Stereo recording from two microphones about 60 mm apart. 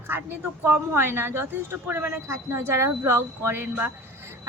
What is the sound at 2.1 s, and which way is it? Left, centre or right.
A woman's voice, right.